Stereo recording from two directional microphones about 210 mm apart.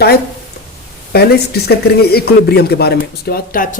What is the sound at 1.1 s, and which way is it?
Speech, 50° left (ahead or behind).